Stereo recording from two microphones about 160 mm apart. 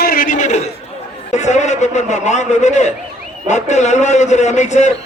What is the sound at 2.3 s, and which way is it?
A man's voice, 45° left (ahead or behind).